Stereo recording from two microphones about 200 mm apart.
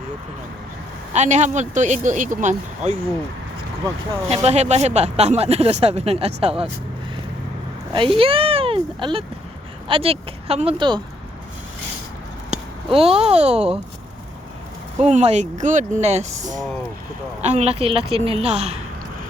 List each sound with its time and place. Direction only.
1.1 s speech: 35° right (ahead or behind)
4.4 s speech: 35° right (ahead or behind)
7.9 s speech: 25° right (ahead or behind)
12.5 s speech: 30° right (ahead or behind)
15.0 s speech: 35° right (ahead or behind)